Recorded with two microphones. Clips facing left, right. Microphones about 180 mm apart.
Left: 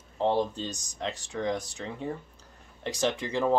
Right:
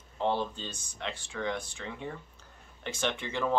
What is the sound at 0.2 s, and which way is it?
Speech, 35° left (ahead or behind).